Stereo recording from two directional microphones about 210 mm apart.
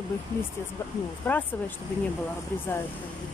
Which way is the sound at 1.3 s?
5° left (ahead or behind).